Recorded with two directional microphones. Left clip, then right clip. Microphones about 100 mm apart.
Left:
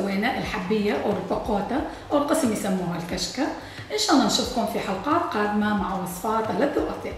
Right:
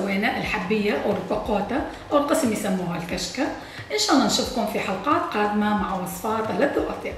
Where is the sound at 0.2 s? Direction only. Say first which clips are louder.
Right 2 dB; 5° left (ahead or behind).